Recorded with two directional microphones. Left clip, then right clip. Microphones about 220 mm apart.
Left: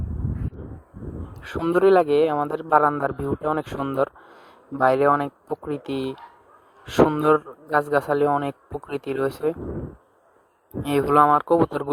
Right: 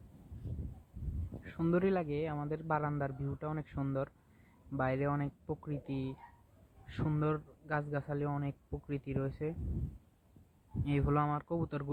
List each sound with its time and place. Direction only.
1.5 s a man's voice: 55° left (ahead or behind)
10.8 s a man's voice: 50° left (ahead or behind)